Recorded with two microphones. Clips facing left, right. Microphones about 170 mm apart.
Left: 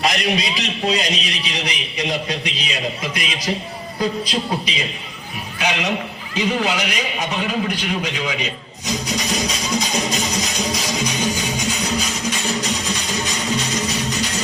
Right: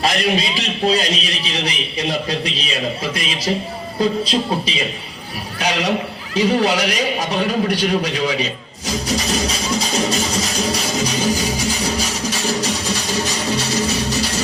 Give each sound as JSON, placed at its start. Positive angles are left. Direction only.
{"t": 0.0, "sound": "a man's voice", "side_deg": -30}
{"t": 5.5, "sound": "music", "side_deg": -35}